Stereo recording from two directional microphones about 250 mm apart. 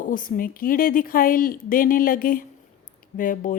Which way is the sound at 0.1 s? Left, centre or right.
Left.